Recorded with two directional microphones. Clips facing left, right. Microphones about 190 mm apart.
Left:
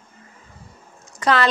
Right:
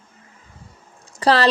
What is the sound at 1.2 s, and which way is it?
Speech, 35° right (ahead or behind).